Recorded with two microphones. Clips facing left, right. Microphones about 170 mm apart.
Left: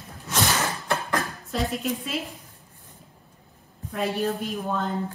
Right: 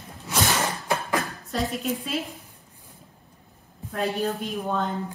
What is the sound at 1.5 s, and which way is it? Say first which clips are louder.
Speech: even; centre (ahead or behind).